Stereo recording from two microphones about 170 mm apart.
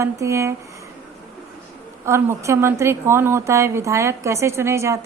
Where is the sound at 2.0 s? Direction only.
15° right (ahead or behind).